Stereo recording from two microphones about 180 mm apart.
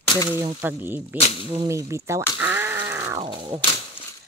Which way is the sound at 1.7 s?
15° right (ahead or behind).